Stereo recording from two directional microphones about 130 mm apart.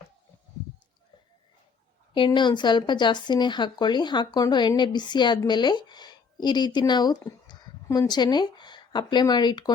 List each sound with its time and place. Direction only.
2.1 s speech: 35° left (ahead or behind)